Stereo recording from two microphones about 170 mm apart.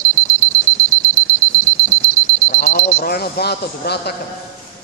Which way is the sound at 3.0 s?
65° left (ahead or behind).